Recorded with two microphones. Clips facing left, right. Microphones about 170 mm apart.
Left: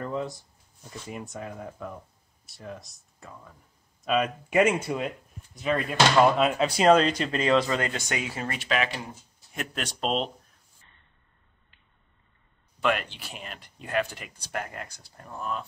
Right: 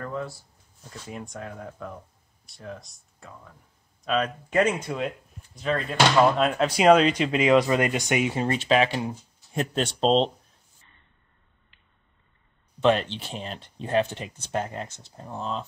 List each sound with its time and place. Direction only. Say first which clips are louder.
0.0 s a sound: left 1 dB; 20° left (ahead or behind)
0.8 s speech: even; 5° left (ahead or behind); by 8.4 s 20° right (ahead or behind)
8.4 s speech: right 6 dB; 30° right (ahead or behind)
12.8 s speech: right 5 dB; 30° right (ahead or behind)